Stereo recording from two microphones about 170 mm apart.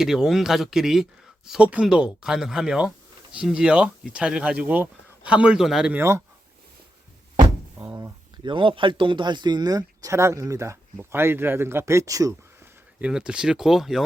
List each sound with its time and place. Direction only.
0.0 s speech: centre (ahead or behind)
6.0 s speech: 15° right (ahead or behind)
7.9 s speech: 25° right (ahead or behind)
13.0 s speech: 5° right (ahead or behind)